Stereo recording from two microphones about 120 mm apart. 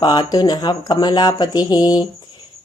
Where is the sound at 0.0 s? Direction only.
40° left (ahead or behind).